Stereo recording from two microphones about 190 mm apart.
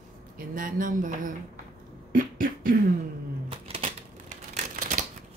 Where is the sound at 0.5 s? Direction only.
45° right (ahead or behind).